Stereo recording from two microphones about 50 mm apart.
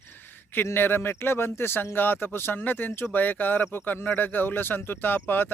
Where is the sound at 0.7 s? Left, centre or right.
Left.